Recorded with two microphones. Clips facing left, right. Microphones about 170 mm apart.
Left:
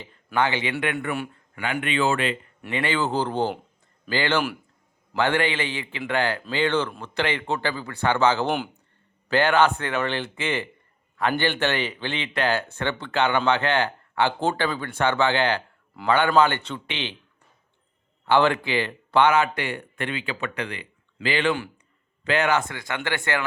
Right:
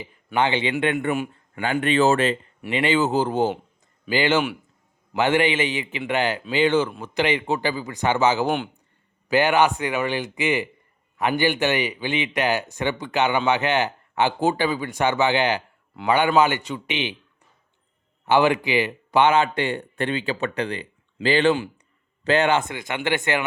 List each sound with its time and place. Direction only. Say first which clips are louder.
0.0 s a sound: right 4 dB; 10° right (ahead or behind)
0.3 s speech: right 2 dB; 25° right (ahead or behind)
2.6 s speech: right 5 dB; 20° right (ahead or behind)
3.0 s a man's voice: right 4 dB; 5° right (ahead or behind)
4.1 s a man's voice: right 3 dB; 20° right (ahead or behind)
8.4 s speech: right 2 dB; centre (ahead or behind)
9.3 s a man's voice: right 1 dB; 15° right (ahead or behind)
18.3 s speech: right 2 dB; 15° right (ahead or behind)